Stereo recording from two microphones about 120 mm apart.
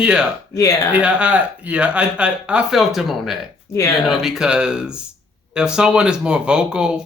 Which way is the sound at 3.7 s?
25° left (ahead or behind).